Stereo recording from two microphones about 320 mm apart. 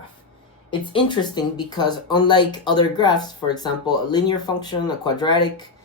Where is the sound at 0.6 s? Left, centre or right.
Centre.